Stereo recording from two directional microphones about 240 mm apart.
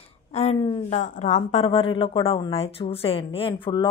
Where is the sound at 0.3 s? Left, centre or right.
Left.